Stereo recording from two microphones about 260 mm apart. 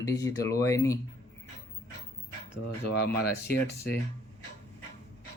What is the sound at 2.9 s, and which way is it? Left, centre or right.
Speech, left.